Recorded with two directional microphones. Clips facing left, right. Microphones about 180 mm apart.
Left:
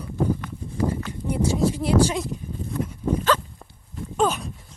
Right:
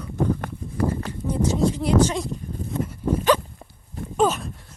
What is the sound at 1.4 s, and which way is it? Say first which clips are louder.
Speech: right 1 dB; 10° left (ahead or behind).